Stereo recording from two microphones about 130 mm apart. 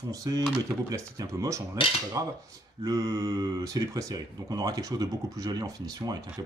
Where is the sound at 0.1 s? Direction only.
25° right (ahead or behind).